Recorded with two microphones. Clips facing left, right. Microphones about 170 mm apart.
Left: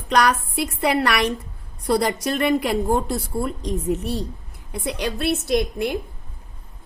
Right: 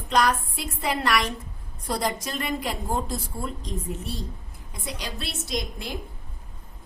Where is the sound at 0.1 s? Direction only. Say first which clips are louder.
Left 4 dB; 70° left (ahead or behind).